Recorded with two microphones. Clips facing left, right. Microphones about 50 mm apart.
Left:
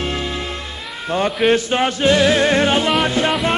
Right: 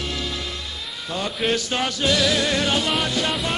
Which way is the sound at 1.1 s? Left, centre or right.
Left.